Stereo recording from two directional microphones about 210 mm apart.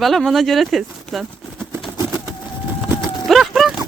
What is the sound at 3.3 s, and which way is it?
Clip-clop, centre (ahead or behind).